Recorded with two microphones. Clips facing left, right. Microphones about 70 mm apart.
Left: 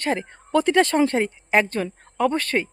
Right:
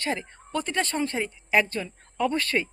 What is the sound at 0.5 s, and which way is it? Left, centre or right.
Speech, left.